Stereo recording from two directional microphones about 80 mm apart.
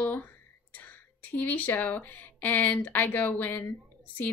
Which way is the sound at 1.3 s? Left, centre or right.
Left.